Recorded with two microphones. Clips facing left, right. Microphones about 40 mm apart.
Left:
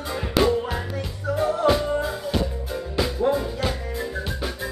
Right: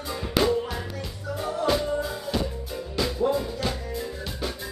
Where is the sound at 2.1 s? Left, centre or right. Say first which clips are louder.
Left 3 dB; centre.